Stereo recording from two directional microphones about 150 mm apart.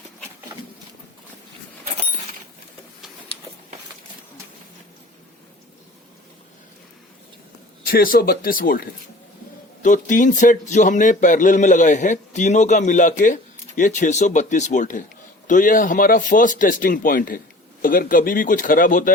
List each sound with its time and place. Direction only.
7.9 s speech: 75° left (ahead or behind)
9.8 s speech: 60° left (ahead or behind)